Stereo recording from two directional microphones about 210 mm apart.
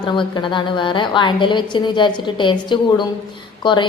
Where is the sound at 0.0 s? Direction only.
20° left (ahead or behind).